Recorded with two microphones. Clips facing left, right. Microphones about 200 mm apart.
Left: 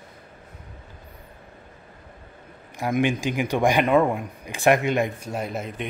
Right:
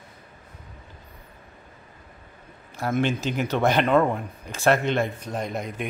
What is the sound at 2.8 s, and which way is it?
Speech, 15° left (ahead or behind).